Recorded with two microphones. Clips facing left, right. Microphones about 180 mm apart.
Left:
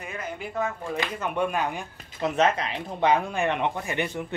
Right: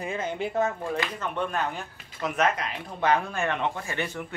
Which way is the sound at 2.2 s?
30° left (ahead or behind).